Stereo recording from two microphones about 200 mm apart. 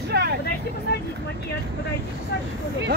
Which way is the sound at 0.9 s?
50° left (ahead or behind).